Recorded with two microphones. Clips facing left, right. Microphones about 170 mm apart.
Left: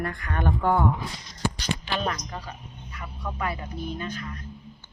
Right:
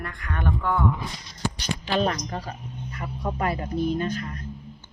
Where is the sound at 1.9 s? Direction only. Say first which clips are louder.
Right 5 dB; 35° right (ahead or behind).